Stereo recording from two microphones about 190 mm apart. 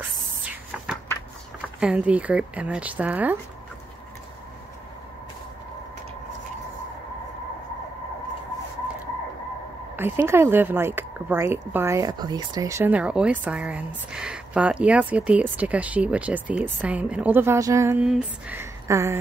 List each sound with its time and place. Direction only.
1.8 s a woman's voice: 5° right (ahead or behind)
9.9 s a woman's voice: 10° right (ahead or behind)